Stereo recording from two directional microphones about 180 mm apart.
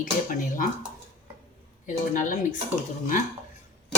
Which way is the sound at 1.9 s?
45° left (ahead or behind).